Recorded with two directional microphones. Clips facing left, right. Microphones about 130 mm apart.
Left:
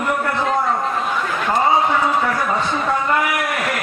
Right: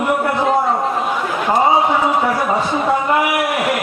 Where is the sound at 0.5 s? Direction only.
25° right (ahead or behind).